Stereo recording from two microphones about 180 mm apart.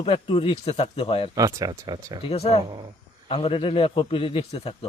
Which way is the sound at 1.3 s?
20° right (ahead or behind).